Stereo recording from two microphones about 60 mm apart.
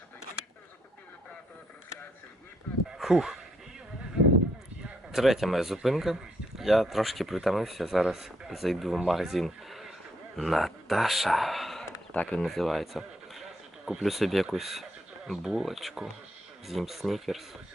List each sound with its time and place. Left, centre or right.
3.0 s speech: centre
5.1 s speech: centre
12.1 s speech: left
12.4 s speech: centre